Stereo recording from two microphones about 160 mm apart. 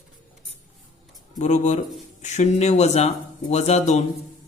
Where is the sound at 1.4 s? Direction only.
50° left (ahead or behind).